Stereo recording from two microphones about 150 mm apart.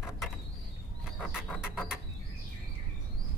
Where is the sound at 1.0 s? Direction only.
5° right (ahead or behind).